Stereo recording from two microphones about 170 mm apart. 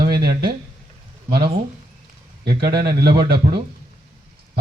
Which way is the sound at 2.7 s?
70° right (ahead or behind).